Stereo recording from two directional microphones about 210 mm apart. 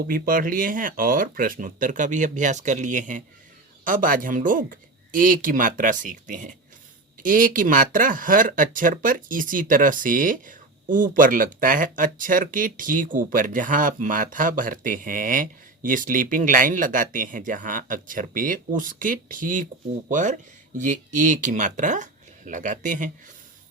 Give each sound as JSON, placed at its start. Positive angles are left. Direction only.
{"t": 0.1, "sound": "speech", "side_deg": -40}